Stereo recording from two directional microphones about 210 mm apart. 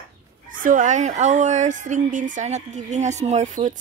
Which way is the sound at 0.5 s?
40° right (ahead or behind).